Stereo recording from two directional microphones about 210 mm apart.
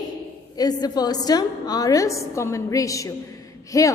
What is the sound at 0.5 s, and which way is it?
A woman's voice, 20° left (ahead or behind).